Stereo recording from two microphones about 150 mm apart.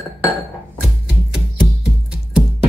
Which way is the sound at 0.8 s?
5° right (ahead or behind).